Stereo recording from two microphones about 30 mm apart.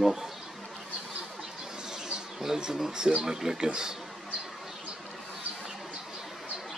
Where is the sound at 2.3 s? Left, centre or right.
Right.